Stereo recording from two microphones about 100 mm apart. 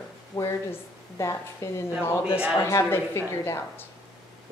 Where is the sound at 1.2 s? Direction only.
30° left (ahead or behind).